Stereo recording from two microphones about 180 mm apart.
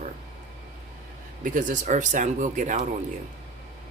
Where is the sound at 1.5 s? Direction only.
45° right (ahead or behind).